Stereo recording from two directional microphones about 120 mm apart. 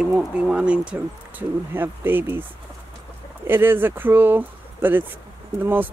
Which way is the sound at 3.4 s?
15° right (ahead or behind).